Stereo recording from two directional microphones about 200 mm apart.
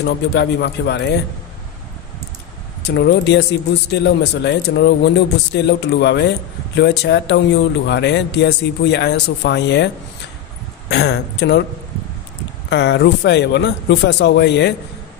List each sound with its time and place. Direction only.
0.0 s speech: 55° left (ahead or behind)
2.8 s speech: 60° left (ahead or behind)
10.9 s speech: 55° left (ahead or behind)
12.6 s speech: 60° left (ahead or behind)